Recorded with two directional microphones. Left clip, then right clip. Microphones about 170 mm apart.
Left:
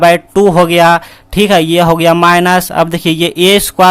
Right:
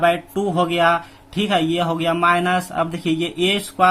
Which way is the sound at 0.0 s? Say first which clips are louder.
Left 11 dB; 65° left (ahead or behind).